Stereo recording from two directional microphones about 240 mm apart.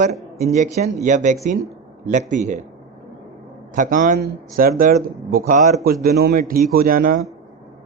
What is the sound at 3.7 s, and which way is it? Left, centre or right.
Speech, right.